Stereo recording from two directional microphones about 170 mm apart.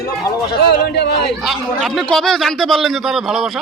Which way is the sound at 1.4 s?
Centre (ahead or behind).